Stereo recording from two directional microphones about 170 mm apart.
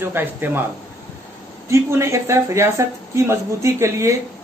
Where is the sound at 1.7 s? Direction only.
15° right (ahead or behind).